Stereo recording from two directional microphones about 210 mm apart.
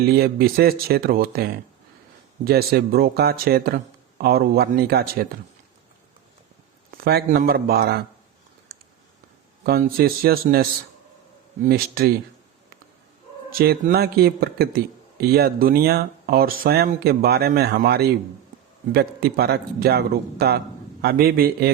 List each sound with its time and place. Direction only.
0.0 s speech: 45° right (ahead or behind)
6.9 s a man's voice: 50° right (ahead or behind)
8.7 s a sound: 50° right (ahead or behind)
9.6 s speech: 45° right (ahead or behind)
13.5 s speech: 45° right (ahead or behind)